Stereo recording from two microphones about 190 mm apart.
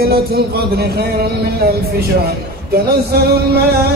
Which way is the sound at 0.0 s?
55° right (ahead or behind).